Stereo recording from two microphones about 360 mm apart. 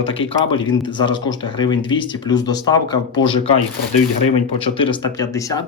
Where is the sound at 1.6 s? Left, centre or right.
Centre.